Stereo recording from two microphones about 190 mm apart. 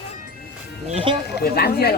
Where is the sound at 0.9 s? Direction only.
25° right (ahead or behind).